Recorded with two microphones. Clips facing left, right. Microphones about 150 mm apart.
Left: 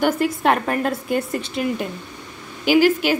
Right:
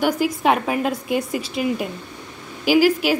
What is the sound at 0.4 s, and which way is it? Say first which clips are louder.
A woman's voice: even; centre (ahead or behind).